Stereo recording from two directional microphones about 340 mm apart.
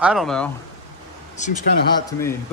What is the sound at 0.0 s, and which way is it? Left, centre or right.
Speech, centre.